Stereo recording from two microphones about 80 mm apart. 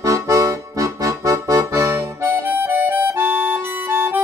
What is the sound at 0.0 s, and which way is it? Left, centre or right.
Accordion, right.